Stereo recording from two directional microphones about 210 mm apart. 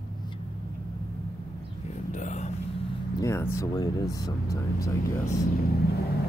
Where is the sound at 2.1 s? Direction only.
35° left (ahead or behind).